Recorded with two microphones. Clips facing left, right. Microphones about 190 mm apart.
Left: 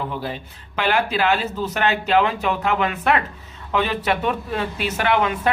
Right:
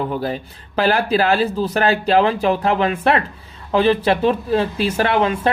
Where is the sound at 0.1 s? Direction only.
45° right (ahead or behind).